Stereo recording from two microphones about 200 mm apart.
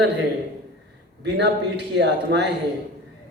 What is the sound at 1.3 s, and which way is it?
A man's voice, 60° right (ahead or behind).